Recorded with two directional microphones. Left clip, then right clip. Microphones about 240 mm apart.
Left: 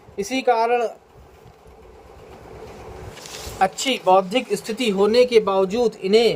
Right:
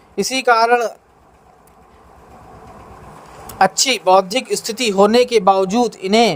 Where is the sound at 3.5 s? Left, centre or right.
Right.